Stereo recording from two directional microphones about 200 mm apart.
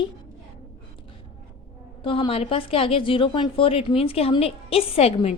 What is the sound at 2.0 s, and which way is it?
A woman's voice, 25° left (ahead or behind).